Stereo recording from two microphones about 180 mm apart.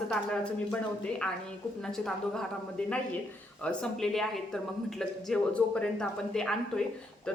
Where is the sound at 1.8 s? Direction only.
5° left (ahead or behind).